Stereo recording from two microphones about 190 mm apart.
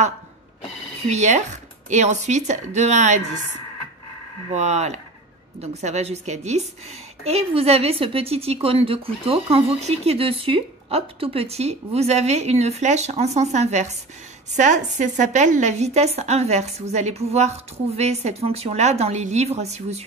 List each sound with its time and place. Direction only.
1.1 s a woman's voice: 40° right (ahead or behind)
4.6 s a woman's voice: 35° right (ahead or behind)